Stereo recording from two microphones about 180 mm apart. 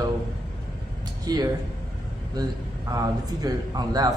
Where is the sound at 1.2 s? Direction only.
20° right (ahead or behind).